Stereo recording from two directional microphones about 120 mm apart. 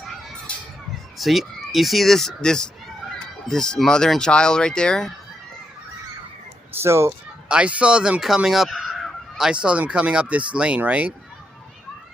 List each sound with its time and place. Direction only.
1.2 s speech: centre (ahead or behind)
6.8 s speech: 20° right (ahead or behind)
7.4 s fowl: 10° right (ahead or behind)